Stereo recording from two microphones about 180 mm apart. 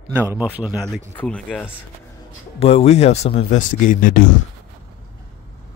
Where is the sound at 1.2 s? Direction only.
5° left (ahead or behind).